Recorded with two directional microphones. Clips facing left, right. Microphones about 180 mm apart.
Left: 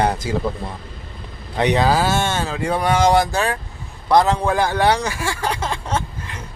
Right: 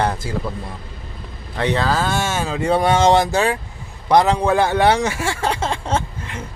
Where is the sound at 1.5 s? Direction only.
15° left (ahead or behind); by 2.6 s 10° right (ahead or behind).